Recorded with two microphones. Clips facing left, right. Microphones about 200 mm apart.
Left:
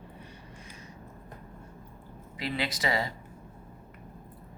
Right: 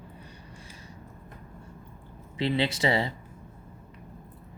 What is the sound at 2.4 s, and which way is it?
Speech, 25° right (ahead or behind).